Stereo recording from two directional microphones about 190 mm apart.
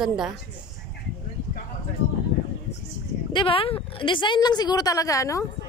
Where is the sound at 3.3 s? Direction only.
25° left (ahead or behind).